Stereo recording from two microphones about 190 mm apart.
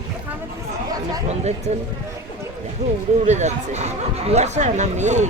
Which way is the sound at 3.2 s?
35° right (ahead or behind).